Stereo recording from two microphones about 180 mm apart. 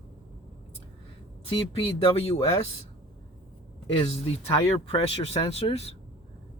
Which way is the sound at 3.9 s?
30° left (ahead or behind).